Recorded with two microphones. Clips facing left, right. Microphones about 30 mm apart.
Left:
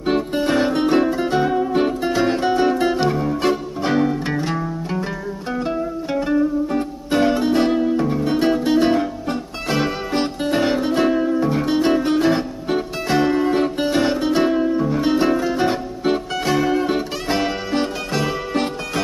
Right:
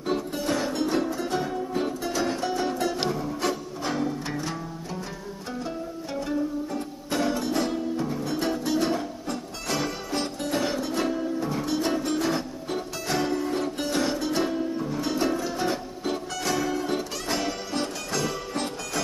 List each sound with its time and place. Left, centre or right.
0.0 s music: left
5.7 s music: left